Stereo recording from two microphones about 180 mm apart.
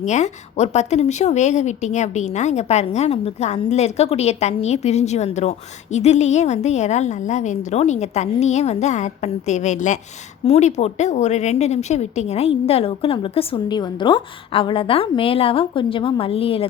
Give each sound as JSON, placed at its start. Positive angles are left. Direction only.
{"t": 0.0, "sound": "a woman's voice", "side_deg": 40}